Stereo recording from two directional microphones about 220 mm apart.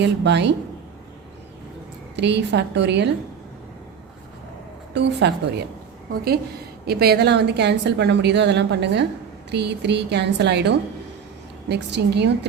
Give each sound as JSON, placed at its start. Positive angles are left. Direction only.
{"t": 0.0, "sound": "a woman's voice", "side_deg": -50}
{"t": 2.1, "sound": "a woman's voice", "side_deg": -50}
{"t": 4.9, "sound": "a woman's voice", "side_deg": -50}
{"t": 6.8, "sound": "a woman's voice", "side_deg": -45}